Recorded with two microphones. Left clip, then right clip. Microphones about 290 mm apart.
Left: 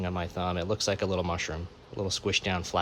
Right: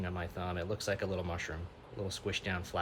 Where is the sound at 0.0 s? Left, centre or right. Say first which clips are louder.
Left 8 dB; centre.